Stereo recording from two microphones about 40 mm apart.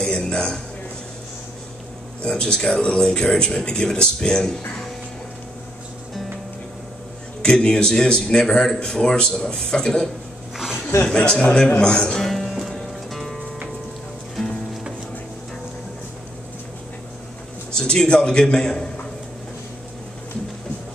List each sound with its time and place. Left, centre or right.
0.0 s music: left
2.2 s speech: centre
7.4 s speech: left
11.1 s speech: centre
12.3 s music: centre
17.7 s a sound: centre
18.0 s speech: left